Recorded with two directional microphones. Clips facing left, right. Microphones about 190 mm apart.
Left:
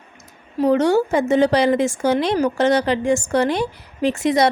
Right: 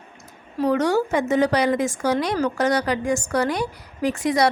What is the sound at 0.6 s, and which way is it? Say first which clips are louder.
Speech: left 4 dB; 25° left (ahead or behind).